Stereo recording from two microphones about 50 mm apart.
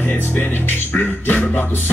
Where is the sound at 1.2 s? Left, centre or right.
Left.